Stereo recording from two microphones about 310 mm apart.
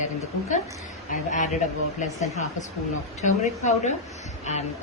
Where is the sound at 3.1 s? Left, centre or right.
Left.